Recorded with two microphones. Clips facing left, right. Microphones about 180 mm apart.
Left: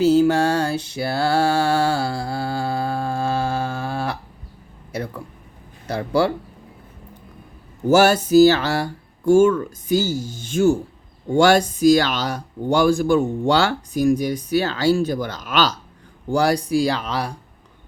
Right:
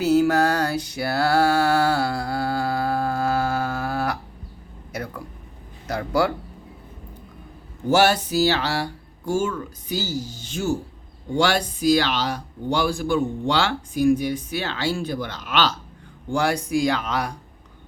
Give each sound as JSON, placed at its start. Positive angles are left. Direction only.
{"t": 0.0, "sound": "mantra", "side_deg": 30}
{"t": 5.9, "sound": "speech", "side_deg": 30}
{"t": 7.9, "sound": "speech", "side_deg": 45}